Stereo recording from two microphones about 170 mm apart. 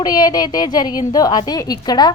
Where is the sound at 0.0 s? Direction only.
20° left (ahead or behind).